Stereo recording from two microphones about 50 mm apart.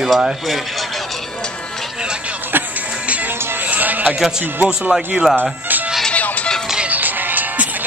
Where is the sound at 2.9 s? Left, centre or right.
Right.